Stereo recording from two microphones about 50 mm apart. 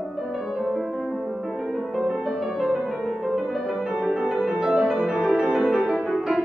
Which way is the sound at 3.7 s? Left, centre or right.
Centre.